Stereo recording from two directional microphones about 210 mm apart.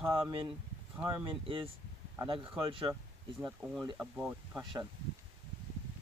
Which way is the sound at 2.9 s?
10° right (ahead or behind).